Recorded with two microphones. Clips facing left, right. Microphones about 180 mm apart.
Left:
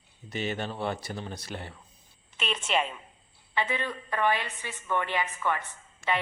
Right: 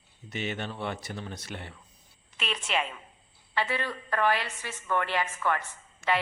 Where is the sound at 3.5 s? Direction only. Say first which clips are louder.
Even; 20° left (ahead or behind).